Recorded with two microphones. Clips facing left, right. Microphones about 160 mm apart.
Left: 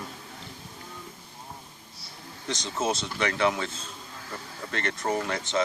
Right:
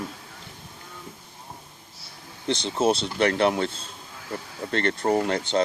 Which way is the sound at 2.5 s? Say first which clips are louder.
Right 6 dB; 30° right (ahead or behind).